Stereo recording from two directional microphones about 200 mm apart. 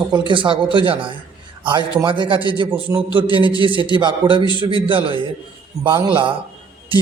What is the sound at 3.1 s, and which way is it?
Speech, 25° right (ahead or behind).